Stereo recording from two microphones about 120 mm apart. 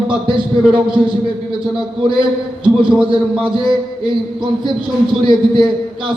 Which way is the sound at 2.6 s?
45° right (ahead or behind).